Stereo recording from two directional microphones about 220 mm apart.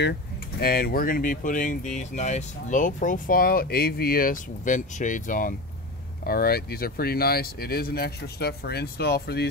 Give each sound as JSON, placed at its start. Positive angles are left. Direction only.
{"t": 0.6, "sound": "speech", "side_deg": 45}